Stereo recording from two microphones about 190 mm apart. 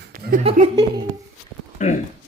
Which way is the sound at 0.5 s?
35° right (ahead or behind).